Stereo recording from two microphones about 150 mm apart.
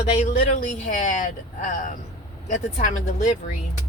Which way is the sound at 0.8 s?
55° left (ahead or behind).